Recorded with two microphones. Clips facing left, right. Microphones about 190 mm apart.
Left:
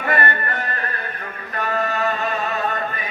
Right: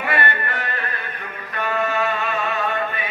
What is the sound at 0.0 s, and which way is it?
Music, 40° left (ahead or behind).